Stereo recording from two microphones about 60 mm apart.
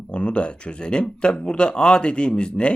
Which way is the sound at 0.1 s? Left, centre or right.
Centre.